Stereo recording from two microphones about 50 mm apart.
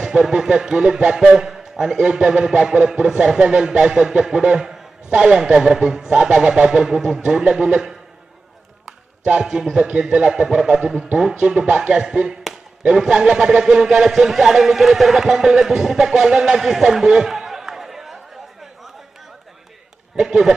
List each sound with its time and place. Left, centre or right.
0.0 s speech: centre
9.2 s speech: centre
12.5 s a sound: centre
13.0 s speech: centre
20.1 s speech: centre